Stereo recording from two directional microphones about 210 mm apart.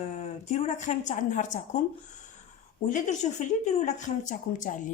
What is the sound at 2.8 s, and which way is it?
Speech, 35° left (ahead or behind).